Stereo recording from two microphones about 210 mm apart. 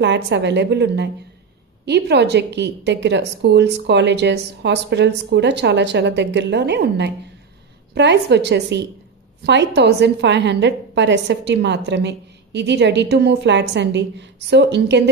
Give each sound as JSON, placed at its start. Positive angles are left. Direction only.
{"t": 0.0, "sound": "a woman's voice", "side_deg": -55}